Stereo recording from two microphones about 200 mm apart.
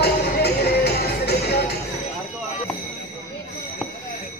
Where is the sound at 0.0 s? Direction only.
55° left (ahead or behind).